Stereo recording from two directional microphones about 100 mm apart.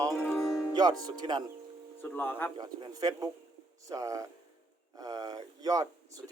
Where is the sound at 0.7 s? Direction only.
45° right (ahead or behind).